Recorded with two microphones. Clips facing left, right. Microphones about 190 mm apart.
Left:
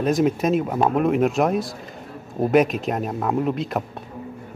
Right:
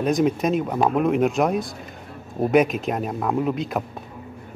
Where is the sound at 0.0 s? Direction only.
Centre (ahead or behind).